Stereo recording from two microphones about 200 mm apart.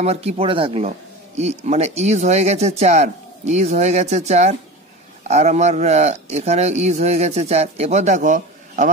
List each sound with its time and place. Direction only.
0.0 s speech: 30° right (ahead or behind)